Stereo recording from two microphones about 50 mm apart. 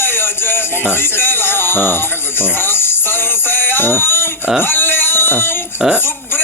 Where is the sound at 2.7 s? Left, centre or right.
Left.